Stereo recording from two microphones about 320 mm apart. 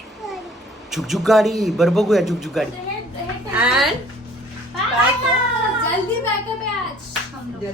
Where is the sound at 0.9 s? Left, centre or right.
Centre.